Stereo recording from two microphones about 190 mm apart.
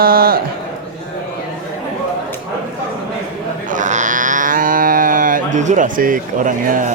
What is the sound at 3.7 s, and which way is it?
Livestock, 40° right (ahead or behind).